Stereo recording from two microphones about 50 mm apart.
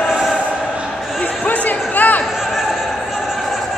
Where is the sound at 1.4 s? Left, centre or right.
Left.